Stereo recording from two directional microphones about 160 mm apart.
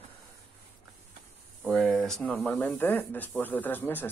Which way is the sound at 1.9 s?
5° left (ahead or behind).